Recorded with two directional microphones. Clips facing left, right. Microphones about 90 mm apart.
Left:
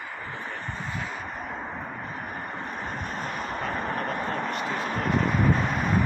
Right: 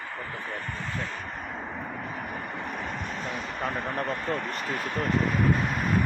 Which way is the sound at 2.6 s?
40° left (ahead or behind).